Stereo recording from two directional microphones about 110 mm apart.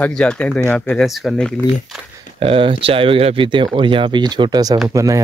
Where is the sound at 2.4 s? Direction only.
55° right (ahead or behind); by 5.2 s 30° right (ahead or behind).